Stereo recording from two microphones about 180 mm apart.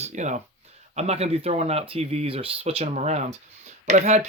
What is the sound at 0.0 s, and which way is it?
Speech, 40° right (ahead or behind).